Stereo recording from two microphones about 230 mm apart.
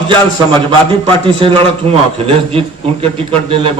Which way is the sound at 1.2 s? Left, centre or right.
Right.